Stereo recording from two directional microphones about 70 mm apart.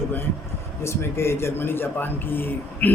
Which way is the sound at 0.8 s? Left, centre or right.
Left.